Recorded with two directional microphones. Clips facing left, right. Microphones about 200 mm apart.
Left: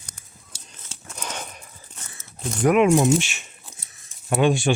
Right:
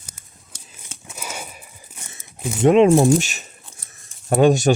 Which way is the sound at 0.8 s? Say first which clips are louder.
Right 1 dB; 5° right (ahead or behind).